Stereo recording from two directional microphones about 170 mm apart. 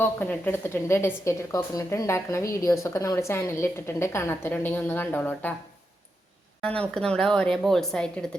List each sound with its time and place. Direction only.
0.0 s a woman's voice: 10° left (ahead or behind)
6.6 s a woman's voice: 5° left (ahead or behind)